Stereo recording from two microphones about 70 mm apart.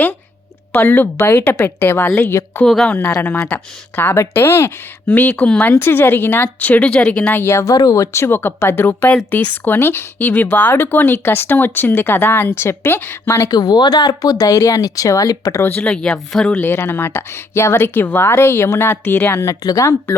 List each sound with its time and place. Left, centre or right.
0.7 s speech: left
1.1 s a woman's voice: left
2.6 s speech: centre
3.1 s a woman's voice: left
5.0 s speech: left
7.4 s a woman's voice: left
13.5 s speech: left
15.6 s speech: left
15.9 s speech: centre
16.5 s a woman's voice: left
19.6 s speech: left